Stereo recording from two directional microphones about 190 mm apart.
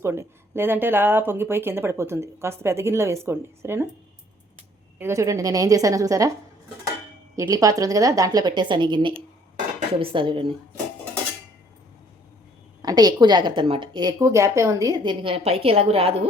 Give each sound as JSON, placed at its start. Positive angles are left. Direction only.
{"t": 0.0, "sound": "speech", "side_deg": -15}
{"t": 4.9, "sound": "speech", "side_deg": -15}
{"t": 7.3, "sound": "a woman's voice", "side_deg": -20}
{"t": 12.8, "sound": "a woman's voice", "side_deg": -20}